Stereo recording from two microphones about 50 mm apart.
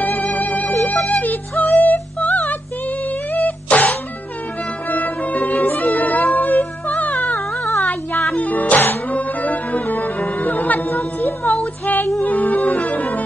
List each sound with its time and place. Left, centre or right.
0.0 s music: left
1.6 s female singing: left
3.4 s cough: left
4.8 s music: left
7.3 s a sound: left
7.8 s music: left